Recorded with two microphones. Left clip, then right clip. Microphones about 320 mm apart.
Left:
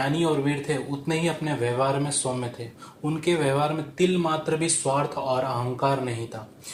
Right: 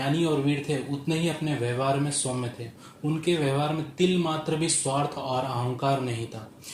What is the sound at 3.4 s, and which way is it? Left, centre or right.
Speech, left.